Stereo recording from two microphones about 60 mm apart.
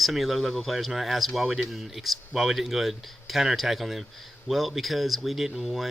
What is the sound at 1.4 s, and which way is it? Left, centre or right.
Speech, centre.